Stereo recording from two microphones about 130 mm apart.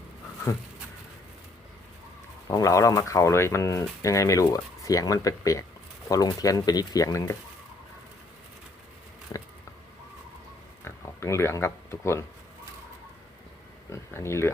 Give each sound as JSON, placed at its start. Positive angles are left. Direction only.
{"t": 2.5, "sound": "speech", "side_deg": 25}
{"t": 10.8, "sound": "speech", "side_deg": 20}
{"t": 13.9, "sound": "speech", "side_deg": 20}